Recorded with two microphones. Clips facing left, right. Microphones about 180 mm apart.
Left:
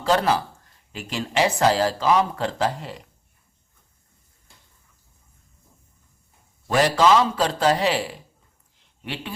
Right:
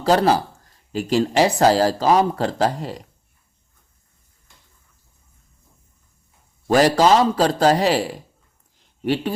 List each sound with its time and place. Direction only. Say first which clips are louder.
0.0 s speech: right 4 dB; 40° right (ahead or behind)
6.7 s speech: right 3 dB; 40° right (ahead or behind)